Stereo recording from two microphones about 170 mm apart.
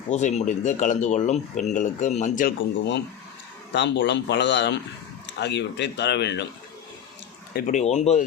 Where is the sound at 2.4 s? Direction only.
75° left (ahead or behind).